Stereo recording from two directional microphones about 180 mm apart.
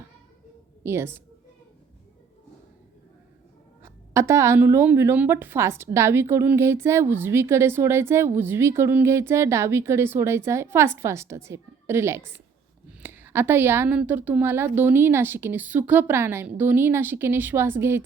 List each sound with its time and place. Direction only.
0.8 s a woman's voice: 15° right (ahead or behind)
3.8 s a woman's voice: 15° right (ahead or behind)